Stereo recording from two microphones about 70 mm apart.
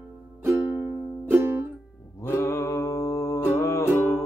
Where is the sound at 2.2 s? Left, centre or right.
Left.